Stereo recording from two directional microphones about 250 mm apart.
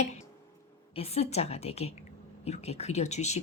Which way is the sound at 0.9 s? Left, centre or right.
Left.